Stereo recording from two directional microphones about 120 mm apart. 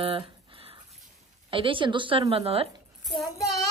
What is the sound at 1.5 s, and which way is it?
A woman's voice, 45° right (ahead or behind).